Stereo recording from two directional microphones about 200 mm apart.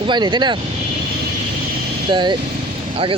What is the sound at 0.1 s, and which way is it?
Speech, 20° right (ahead or behind).